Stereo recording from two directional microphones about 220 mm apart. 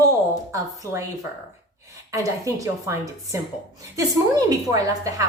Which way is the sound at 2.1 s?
15° right (ahead or behind).